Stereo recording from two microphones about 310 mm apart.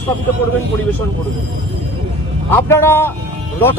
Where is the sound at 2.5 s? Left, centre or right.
Centre.